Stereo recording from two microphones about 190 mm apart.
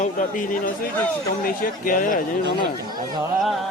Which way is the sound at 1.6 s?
45° left (ahead or behind).